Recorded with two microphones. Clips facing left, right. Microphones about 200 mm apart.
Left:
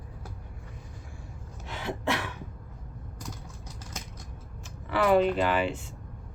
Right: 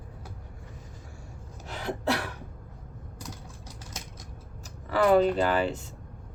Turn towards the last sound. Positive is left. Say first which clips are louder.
# right 1 dB
turn(degrees=-40)  # may be behind; listen again after turning